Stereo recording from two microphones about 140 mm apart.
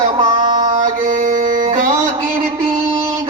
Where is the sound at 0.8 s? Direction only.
65° right (ahead or behind).